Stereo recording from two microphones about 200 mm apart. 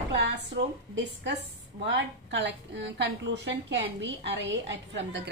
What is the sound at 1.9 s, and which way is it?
A woman's voice, 60° right (ahead or behind).